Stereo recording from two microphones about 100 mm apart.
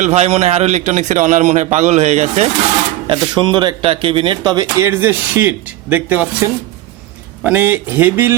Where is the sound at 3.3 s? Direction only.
50° right (ahead or behind).